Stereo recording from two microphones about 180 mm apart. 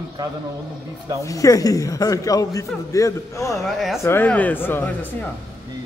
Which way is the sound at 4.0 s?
10° left (ahead or behind).